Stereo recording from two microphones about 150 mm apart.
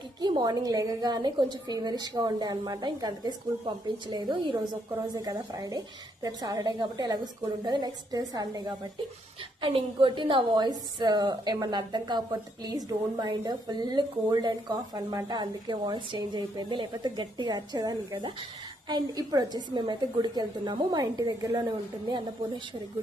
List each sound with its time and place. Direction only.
0.2 s a woman's voice: 30° right (ahead or behind)